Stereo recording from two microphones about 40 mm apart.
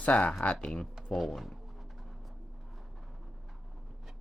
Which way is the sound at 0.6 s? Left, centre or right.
Left.